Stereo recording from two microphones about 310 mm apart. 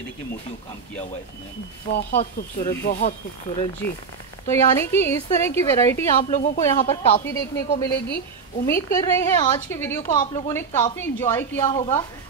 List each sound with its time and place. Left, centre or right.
2.0 s speech: left
4.5 s a woman's voice: centre
6.3 s a woman's voice: left; by 11.6 s centre
11.6 s speech: centre